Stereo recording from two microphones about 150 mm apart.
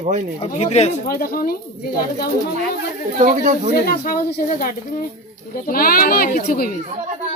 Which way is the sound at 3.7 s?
85° left.